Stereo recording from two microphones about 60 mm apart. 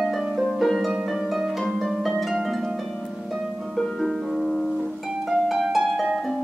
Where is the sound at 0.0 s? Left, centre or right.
Centre.